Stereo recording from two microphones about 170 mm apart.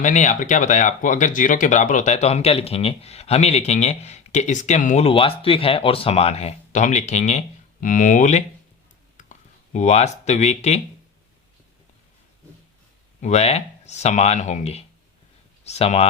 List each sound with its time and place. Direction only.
0.0 s speech: 45° left (ahead or behind)
9.1 s a sound: 45° left (ahead or behind)
13.2 s speech: 40° left (ahead or behind)